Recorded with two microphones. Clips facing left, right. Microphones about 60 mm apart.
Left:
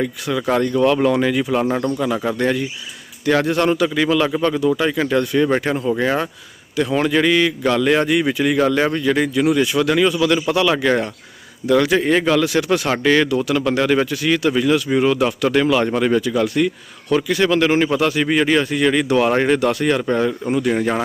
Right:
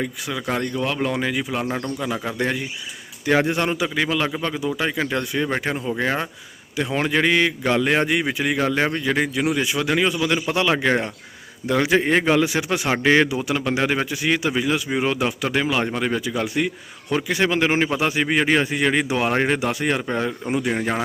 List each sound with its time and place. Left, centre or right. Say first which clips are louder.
0.0 s a man's voice: left 6 dB; centre